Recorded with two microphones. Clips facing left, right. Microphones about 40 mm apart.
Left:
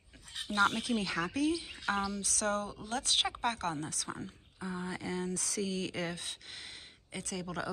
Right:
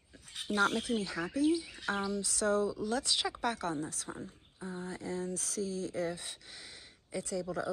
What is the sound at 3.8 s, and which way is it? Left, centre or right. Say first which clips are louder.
Speech: even; left.